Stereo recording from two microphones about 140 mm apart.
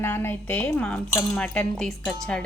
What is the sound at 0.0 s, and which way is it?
A woman's voice, 15° left (ahead or behind).